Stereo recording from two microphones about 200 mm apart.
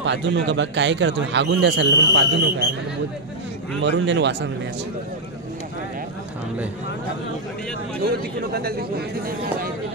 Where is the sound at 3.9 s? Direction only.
60° right (ahead or behind).